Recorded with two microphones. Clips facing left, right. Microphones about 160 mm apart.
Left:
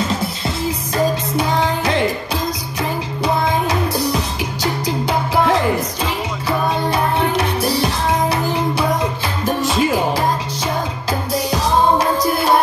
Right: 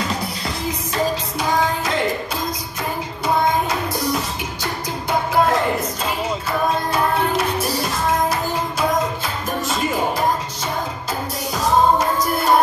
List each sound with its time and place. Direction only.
4.8 s music: 75° left (ahead or behind)
7.8 s music: 65° left (ahead or behind)
9.6 s music: 80° left